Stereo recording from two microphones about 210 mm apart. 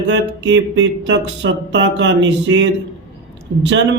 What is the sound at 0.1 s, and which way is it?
Speech, 60° right (ahead or behind).